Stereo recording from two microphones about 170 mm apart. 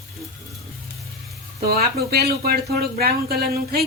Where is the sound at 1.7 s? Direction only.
65° right (ahead or behind).